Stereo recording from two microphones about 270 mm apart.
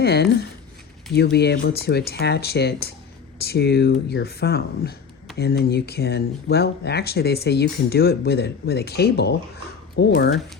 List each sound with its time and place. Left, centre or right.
0.0 s speech: left